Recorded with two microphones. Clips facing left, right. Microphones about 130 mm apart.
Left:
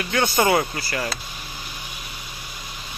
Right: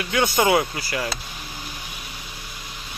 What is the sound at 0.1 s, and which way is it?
Speech, 5° right (ahead or behind).